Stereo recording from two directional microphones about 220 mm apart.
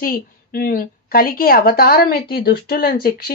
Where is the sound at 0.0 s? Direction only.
40° left (ahead or behind).